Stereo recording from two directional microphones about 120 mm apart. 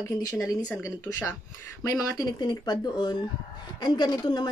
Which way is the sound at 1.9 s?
35° left (ahead or behind).